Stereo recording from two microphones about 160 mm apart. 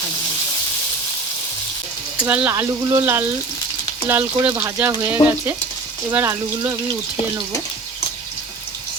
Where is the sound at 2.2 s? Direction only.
10° right (ahead or behind).